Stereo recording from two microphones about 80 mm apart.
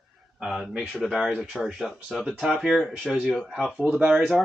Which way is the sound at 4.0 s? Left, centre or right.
Centre.